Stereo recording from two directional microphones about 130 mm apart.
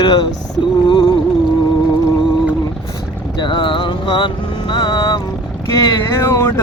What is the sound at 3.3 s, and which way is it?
Music, 35° left (ahead or behind).